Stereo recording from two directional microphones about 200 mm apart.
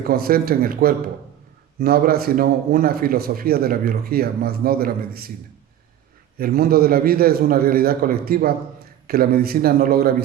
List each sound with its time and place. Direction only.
0.0 s a man's voice: 50° right (ahead or behind)
6.4 s a man's voice: 50° right (ahead or behind)